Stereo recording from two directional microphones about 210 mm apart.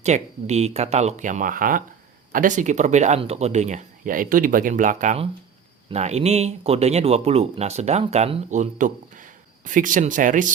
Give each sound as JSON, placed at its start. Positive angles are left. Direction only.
{"t": 0.0, "sound": "speech", "side_deg": -30}